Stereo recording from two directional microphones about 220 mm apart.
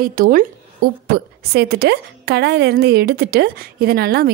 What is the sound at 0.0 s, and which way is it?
A woman's voice, 40° right (ahead or behind).